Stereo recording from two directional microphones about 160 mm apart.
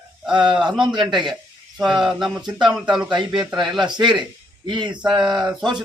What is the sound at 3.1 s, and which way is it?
Speech, 30° right (ahead or behind).